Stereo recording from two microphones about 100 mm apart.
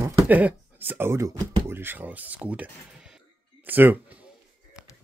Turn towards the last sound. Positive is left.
turn(degrees=-15)  # may be behind; listen again after turning